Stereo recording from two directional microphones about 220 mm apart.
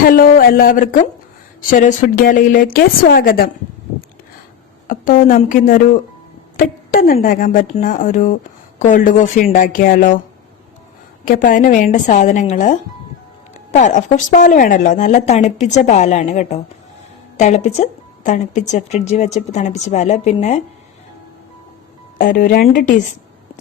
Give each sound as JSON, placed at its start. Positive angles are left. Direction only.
{"t": 0.0, "sound": "a woman's voice", "side_deg": 40}
{"t": 4.9, "sound": "a woman's voice", "side_deg": 40}
{"t": 11.3, "sound": "a woman's voice", "side_deg": 35}
{"t": 22.2, "sound": "a woman's voice", "side_deg": 40}